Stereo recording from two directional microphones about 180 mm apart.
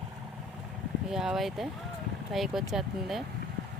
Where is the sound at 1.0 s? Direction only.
5° right (ahead or behind).